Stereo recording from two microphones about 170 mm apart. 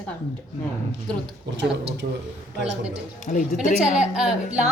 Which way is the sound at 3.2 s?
45° left (ahead or behind).